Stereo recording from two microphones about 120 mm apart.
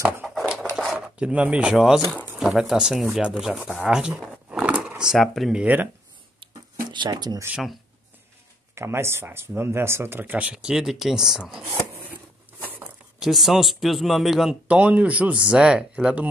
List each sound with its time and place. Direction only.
0.3 s a sound: centre (ahead or behind)
0.9 s speech: 10° right (ahead or behind)
6.4 s a sound: 40° right (ahead or behind)
8.7 s speech: 20° right (ahead or behind); by 11.6 s 5° right (ahead or behind)
12.6 s zipper: 15° right (ahead or behind)
13.2 s speech: centre (ahead or behind)